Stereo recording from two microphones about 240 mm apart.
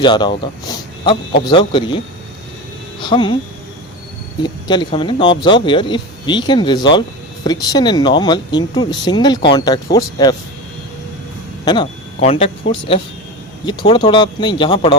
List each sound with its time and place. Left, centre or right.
0.0 s speech: centre
3.0 s speech: centre
4.4 s speech: centre
11.6 s speech: centre